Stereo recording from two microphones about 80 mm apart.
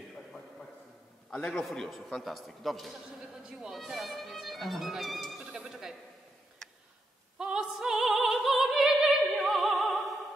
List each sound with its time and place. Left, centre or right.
1.3 s a man's voice: centre
3.4 s violin: centre
7.3 s opera: centre